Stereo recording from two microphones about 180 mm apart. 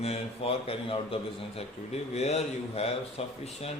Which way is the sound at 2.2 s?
35° left (ahead or behind).